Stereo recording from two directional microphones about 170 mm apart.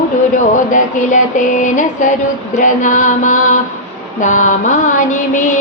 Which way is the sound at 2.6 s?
50° left (ahead or behind).